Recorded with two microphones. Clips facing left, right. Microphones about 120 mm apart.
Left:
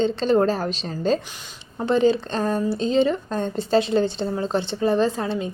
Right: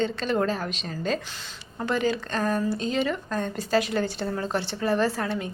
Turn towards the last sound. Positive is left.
turn(degrees=20)  # may be behind; listen again after turning